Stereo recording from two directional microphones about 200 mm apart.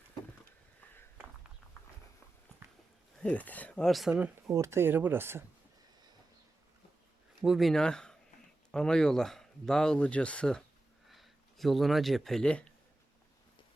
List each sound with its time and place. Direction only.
3.2 s speech: 5° left (ahead or behind); by 5.5 s 10° right (ahead or behind)
7.4 s speech: centre (ahead or behind)